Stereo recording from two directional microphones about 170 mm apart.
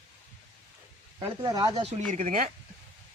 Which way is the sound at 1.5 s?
20° right (ahead or behind).